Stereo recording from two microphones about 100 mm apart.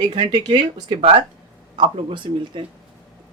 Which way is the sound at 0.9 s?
65° right (ahead or behind).